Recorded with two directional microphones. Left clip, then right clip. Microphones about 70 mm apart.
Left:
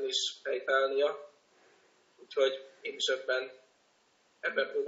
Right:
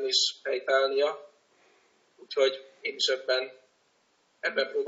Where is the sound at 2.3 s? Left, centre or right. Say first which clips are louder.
Right 4 dB; right.